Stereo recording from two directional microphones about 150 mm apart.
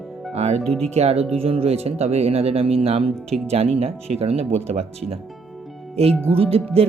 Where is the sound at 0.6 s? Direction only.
5° left (ahead or behind).